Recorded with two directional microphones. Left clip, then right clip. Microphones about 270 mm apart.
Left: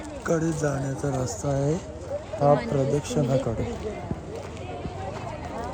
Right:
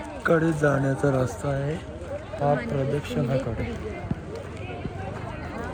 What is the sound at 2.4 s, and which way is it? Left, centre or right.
Speech, left.